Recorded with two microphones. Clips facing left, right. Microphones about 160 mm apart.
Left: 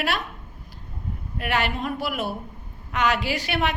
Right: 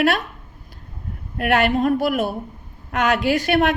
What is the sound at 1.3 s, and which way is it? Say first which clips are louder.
A woman's voice: right 8 dB; 55° right (ahead or behind).